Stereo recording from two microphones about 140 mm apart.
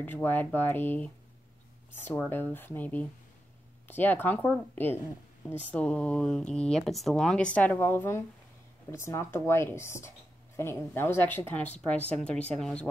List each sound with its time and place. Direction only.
0.0 s speech: 15° left (ahead or behind)
2.2 s speech: 15° left (ahead or behind)